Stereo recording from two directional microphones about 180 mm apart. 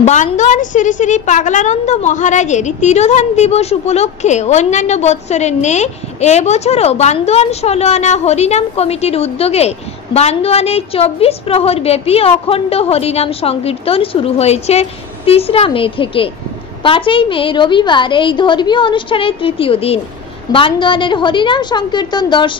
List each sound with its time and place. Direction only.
0.0 s a woman's voice: 40° left (ahead or behind); by 22.5 s 25° left (ahead or behind)